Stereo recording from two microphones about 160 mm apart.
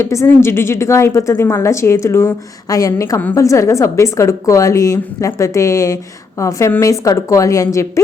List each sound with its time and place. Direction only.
0.0 s a woman's voice: 20° left (ahead or behind)